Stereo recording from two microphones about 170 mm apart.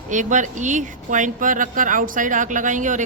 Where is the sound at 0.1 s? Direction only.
45° right (ahead or behind).